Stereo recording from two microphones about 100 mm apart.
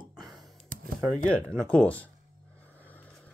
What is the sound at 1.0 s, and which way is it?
Speech, 5° left (ahead or behind).